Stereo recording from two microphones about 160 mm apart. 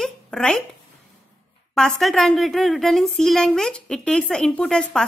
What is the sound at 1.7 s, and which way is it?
A woman's voice, centre (ahead or behind).